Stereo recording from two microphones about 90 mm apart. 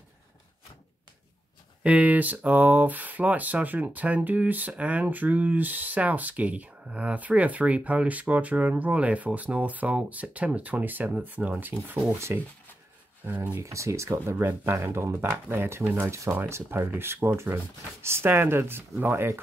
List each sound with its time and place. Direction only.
1.8 s speech: 15° right (ahead or behind)
12.1 s speech: 30° right (ahead or behind)
13.6 s speech: 35° right (ahead or behind)